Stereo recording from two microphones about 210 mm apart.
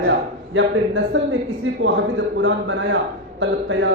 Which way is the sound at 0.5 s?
60° right (ahead or behind).